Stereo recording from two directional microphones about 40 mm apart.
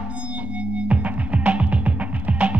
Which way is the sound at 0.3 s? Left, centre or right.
Right.